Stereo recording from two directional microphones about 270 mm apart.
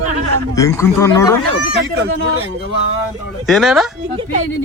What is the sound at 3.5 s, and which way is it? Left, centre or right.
Speech, centre.